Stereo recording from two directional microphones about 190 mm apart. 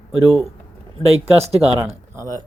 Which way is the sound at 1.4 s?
30° right (ahead or behind).